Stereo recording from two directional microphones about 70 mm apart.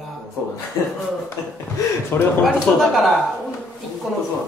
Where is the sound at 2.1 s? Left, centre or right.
Left.